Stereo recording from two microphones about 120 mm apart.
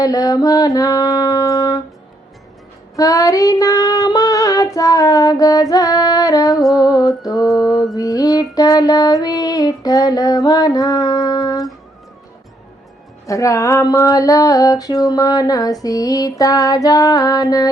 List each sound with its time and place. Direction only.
0.0 s music: 30° left (ahead or behind)
2.9 s female singing: 30° left (ahead or behind)
6.7 s music: 30° left (ahead or behind)
7.9 s child singing: 30° left (ahead or behind)
13.2 s female singing: 25° left (ahead or behind)